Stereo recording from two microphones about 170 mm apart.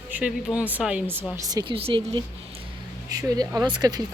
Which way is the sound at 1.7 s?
30° right (ahead or behind).